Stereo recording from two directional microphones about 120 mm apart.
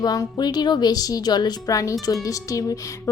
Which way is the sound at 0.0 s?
30° left (ahead or behind).